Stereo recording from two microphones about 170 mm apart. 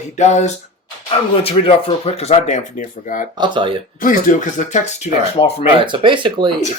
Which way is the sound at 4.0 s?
50° left (ahead or behind).